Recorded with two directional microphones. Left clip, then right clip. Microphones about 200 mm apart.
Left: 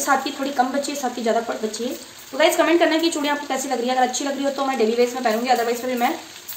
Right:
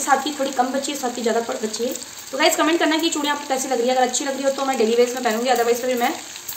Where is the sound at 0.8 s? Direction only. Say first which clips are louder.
Even; 5° right (ahead or behind).